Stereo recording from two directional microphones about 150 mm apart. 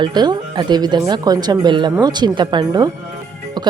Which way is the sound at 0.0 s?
30° right (ahead or behind).